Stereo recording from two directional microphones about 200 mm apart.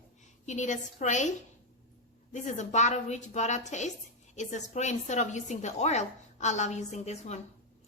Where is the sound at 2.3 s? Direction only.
35° left (ahead or behind).